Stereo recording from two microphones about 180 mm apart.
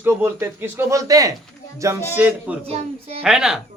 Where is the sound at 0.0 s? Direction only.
10° right (ahead or behind).